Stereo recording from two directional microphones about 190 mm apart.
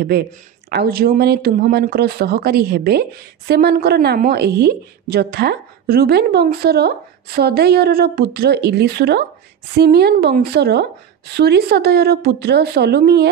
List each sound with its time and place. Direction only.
0.7 s speech: 55° right (ahead or behind)